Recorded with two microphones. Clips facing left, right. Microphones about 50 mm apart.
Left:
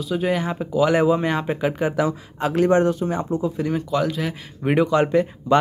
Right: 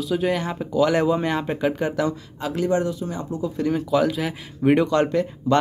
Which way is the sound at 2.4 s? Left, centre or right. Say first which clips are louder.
Left 5 dB; left.